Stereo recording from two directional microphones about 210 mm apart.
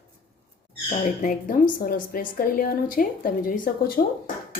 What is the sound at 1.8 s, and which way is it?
A woman's voice, 40° left (ahead or behind).